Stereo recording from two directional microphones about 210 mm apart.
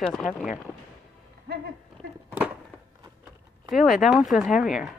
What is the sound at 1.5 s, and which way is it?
Speech, 55° right (ahead or behind).